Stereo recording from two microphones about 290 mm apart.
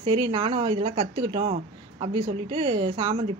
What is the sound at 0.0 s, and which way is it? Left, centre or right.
A woman's voice, centre.